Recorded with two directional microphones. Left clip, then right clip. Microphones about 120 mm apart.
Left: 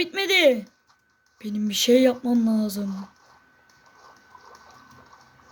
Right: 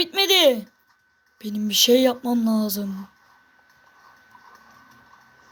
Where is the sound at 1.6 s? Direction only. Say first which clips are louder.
Right 2 dB; 20° left (ahead or behind).